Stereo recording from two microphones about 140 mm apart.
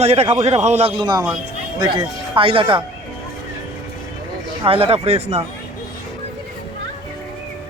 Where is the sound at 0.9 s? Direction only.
30° right (ahead or behind).